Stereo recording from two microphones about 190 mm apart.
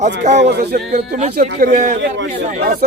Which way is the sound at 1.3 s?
50° right (ahead or behind).